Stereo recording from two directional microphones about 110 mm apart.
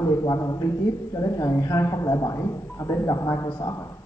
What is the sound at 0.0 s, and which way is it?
Speech, 35° left (ahead or behind).